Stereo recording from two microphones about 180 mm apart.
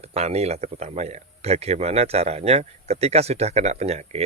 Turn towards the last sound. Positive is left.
turn(degrees=-35)  # may be behind; listen again after turning